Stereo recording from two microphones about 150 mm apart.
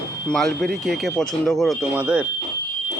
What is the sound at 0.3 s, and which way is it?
Speech, 5° left (ahead or behind).